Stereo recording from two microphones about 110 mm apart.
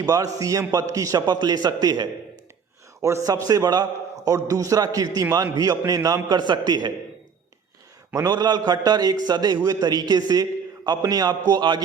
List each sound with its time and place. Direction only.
0.0 s a man's voice: 30° right (ahead or behind)
8.1 s a man's voice: 35° right (ahead or behind)